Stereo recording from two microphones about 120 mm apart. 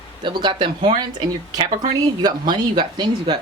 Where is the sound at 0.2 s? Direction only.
40° right (ahead or behind).